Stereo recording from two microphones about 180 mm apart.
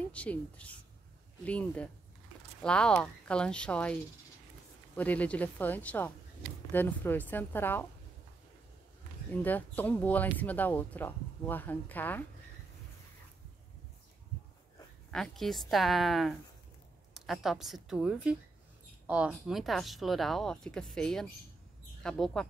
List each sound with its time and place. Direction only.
0.1 s speech: 5° left (ahead or behind)
9.3 s speech: 10° left (ahead or behind)
15.0 s speech: centre (ahead or behind)